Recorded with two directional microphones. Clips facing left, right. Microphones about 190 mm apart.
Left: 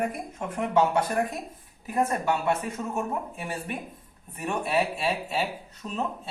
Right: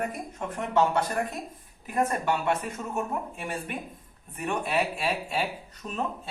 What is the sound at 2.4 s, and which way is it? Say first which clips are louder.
Speech: left 1 dB; 5° left (ahead or behind).